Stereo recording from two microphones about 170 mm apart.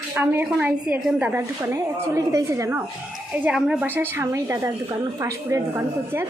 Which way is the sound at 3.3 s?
5° right (ahead or behind).